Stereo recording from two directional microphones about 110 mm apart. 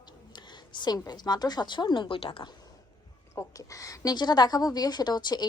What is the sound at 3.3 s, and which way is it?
A woman's voice, 30° left (ahead or behind).